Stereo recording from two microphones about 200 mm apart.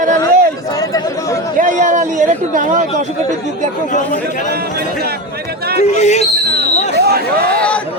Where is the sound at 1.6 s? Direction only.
40° right (ahead or behind).